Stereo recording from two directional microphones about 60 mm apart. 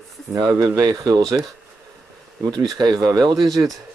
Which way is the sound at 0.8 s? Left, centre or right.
Right.